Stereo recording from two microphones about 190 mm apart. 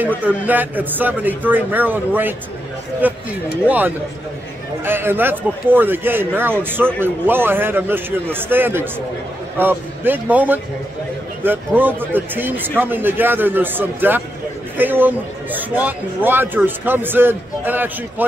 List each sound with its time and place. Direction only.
0.2 s a man's voice: 10° right (ahead or behind)